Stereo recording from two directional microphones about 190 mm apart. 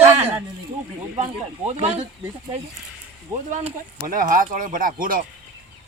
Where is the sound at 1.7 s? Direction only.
35° right (ahead or behind).